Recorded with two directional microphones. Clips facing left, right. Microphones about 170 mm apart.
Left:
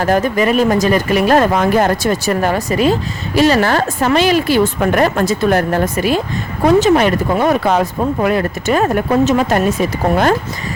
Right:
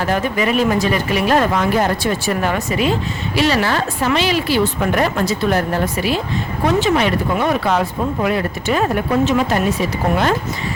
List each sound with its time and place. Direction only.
0.0 s speech: 45° left (ahead or behind)